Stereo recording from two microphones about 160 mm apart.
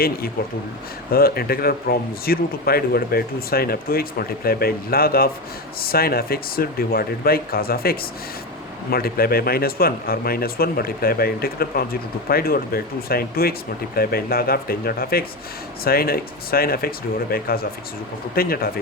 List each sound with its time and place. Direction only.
1.1 s speech: 70° left (ahead or behind)